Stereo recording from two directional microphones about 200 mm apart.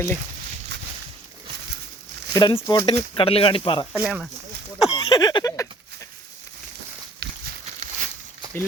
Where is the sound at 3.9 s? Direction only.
Centre (ahead or behind).